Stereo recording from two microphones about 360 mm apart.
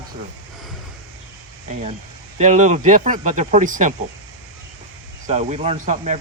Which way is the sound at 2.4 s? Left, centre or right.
Centre.